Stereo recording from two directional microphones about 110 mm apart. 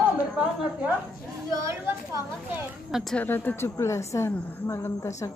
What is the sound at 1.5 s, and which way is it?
Speech, 30° right (ahead or behind).